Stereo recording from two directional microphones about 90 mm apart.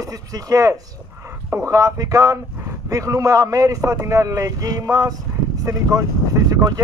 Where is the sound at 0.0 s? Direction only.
40° right (ahead or behind).